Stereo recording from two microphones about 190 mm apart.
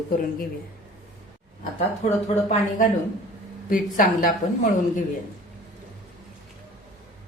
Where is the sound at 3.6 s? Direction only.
45° left (ahead or behind).